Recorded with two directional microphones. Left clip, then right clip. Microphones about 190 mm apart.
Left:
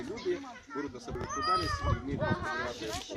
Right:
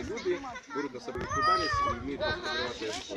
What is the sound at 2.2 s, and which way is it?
Speech, 20° left (ahead or behind).